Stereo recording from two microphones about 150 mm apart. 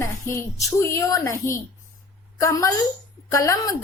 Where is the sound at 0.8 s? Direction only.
20° left (ahead or behind).